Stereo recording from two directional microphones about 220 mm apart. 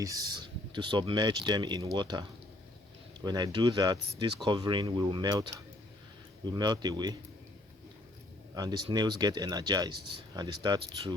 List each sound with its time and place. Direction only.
0.0 s speech: 15° right (ahead or behind)
8.5 s speech: 15° right (ahead or behind)